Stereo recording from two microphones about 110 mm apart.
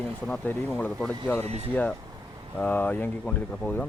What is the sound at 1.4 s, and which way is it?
Speech, 70° right (ahead or behind).